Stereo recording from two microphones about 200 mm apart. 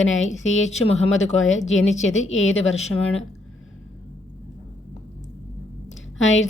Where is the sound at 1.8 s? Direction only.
35° left (ahead or behind).